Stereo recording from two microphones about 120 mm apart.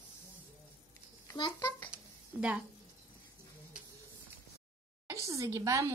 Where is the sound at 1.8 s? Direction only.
10° right (ahead or behind).